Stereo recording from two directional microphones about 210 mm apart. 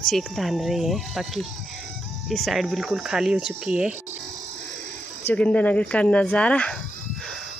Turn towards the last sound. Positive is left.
turn(degrees=5)  # may be behind; listen again after turning